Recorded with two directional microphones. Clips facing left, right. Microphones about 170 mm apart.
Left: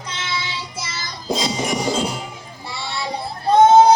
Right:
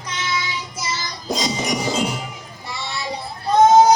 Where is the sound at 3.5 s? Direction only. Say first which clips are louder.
Left 1 dB; 30° left (ahead or behind).